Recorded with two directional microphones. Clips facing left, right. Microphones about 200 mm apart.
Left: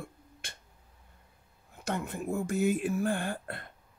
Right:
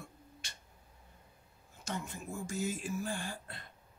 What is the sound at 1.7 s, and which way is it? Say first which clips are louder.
Speech: left 7 dB; 60° left (ahead or behind).